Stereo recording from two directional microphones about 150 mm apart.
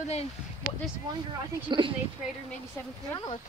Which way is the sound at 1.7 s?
30° right (ahead or behind).